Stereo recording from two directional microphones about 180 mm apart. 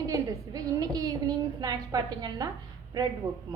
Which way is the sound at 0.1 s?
20° right (ahead or behind).